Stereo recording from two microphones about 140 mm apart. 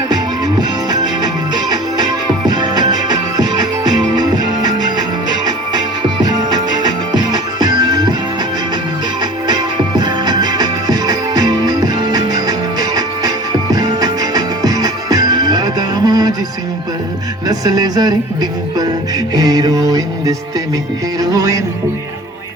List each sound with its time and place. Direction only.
0.1 s music: 30° right (ahead or behind)
2.5 s music: 30° right (ahead or behind)
6.8 s music: 30° right (ahead or behind)
9.5 s music: 30° right (ahead or behind)
17.5 s music: 25° right (ahead or behind)
19.3 s music: 30° right (ahead or behind)